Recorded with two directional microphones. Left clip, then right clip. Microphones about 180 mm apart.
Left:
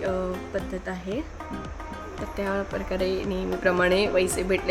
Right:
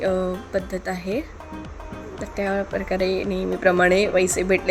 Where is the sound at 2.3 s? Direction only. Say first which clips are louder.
Right 4 dB; 15° right (ahead or behind).